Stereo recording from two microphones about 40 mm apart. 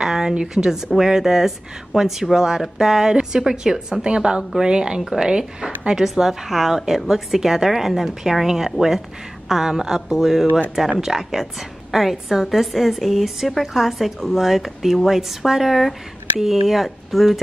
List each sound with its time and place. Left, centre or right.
0.0 s a woman's voice: centre
4.0 s speech: right
6.0 s a woman's voice: centre